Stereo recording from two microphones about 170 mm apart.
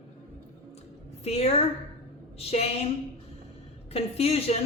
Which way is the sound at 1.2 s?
40° left (ahead or behind).